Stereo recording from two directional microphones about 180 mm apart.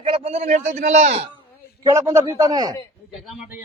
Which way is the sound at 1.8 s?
15° right (ahead or behind).